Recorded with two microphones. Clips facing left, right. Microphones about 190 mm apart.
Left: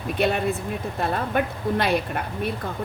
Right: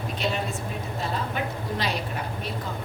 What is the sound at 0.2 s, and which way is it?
A woman's voice, 60° left (ahead or behind).